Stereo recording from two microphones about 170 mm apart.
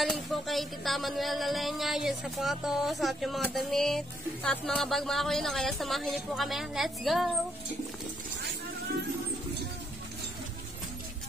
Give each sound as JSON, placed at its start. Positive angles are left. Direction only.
{"t": 0.0, "sound": "music", "side_deg": 0}